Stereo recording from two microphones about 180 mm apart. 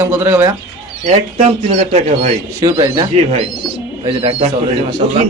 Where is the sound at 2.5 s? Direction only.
20° right (ahead or behind).